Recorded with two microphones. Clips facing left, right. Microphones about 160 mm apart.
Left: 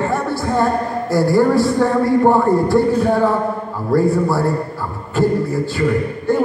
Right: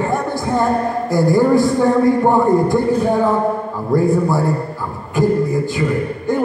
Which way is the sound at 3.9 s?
15° right (ahead or behind).